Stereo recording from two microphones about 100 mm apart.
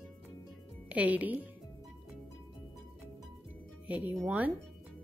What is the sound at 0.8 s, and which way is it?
Speech, 15° right (ahead or behind).